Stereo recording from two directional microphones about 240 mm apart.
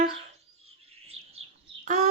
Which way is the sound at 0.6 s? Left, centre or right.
Right.